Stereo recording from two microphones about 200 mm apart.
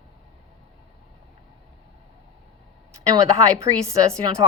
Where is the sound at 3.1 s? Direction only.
15° right (ahead or behind).